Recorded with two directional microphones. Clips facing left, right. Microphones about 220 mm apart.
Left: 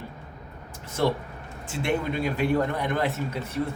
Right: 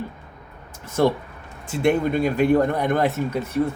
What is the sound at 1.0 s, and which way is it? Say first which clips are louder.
A man's voice: right 5 dB; 50° right (ahead or behind).